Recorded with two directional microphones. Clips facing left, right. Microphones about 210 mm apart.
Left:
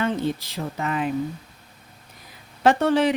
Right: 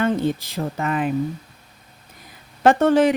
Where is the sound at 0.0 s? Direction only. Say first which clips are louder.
Right 4 dB; 50° right (ahead or behind).